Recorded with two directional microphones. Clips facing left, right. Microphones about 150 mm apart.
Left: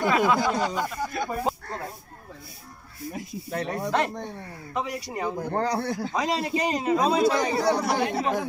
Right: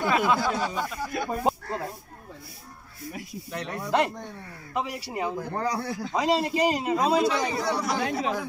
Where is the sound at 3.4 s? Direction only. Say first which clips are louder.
Left 6 dB; 55° left (ahead or behind).